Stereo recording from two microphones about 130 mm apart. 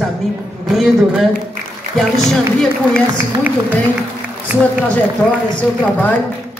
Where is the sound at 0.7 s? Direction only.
Centre (ahead or behind).